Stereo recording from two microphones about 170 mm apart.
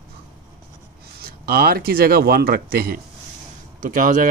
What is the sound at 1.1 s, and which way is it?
Speech, 65° right (ahead or behind).